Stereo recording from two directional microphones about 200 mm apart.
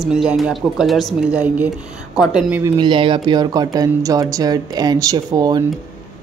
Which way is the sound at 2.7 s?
25° right (ahead or behind).